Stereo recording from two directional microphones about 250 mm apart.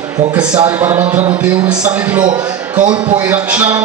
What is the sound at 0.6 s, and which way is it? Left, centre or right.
Speech, centre.